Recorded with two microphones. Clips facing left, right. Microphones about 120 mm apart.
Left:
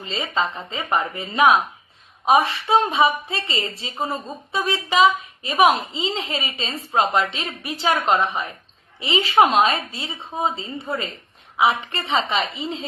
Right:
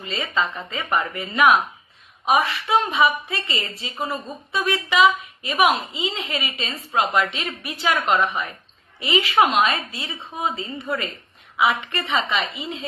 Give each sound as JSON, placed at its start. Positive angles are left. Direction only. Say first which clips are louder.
{"t": 0.0, "sound": "a woman's voice", "louder": "left 1 dB", "side_deg": 25}